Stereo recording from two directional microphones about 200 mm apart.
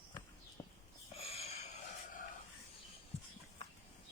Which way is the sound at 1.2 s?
30° left (ahead or behind).